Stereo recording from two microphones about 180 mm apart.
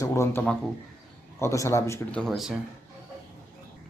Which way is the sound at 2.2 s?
Centre (ahead or behind).